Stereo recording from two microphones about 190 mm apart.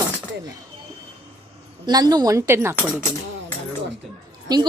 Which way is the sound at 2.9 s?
15° left (ahead or behind).